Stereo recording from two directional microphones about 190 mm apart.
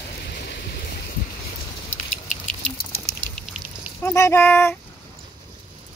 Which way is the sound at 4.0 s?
15° left (ahead or behind).